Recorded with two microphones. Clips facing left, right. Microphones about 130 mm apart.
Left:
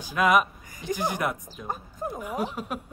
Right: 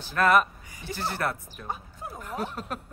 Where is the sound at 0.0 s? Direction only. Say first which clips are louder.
Even; 10° left (ahead or behind).